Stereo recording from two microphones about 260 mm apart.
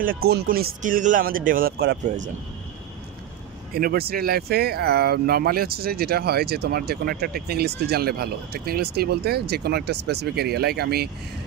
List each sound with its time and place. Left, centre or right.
0.0 s speech: right
3.7 s speech: right